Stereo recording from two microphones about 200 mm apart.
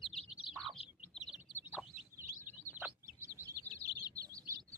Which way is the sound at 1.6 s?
10° right (ahead or behind).